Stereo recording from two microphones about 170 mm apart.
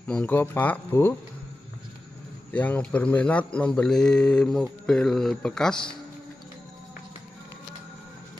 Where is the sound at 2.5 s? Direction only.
10° left (ahead or behind).